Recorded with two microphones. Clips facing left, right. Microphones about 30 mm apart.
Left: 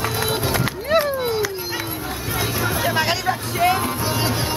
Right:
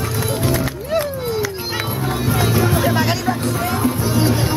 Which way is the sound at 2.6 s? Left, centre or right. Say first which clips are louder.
Right 3 dB; centre.